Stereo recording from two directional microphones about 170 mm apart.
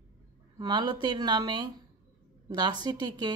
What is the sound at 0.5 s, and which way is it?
Speech, 25° right (ahead or behind).